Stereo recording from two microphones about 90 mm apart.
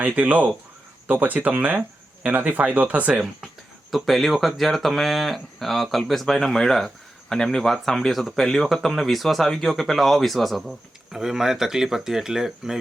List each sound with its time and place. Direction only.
0.0 s speech: 15° right (ahead or behind)
3.9 s speech: centre (ahead or behind)